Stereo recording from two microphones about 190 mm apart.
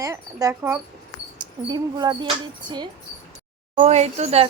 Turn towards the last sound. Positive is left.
turn(degrees=-35)  # may be behind; listen again after turning